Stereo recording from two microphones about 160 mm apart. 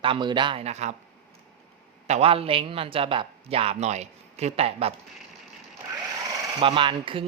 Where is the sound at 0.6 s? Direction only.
45° right (ahead or behind).